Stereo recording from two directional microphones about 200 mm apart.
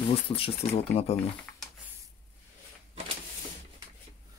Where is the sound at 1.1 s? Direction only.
Centre (ahead or behind).